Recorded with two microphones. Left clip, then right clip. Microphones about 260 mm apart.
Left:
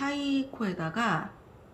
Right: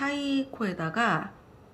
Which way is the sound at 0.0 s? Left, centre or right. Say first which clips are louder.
Right 1 dB; centre.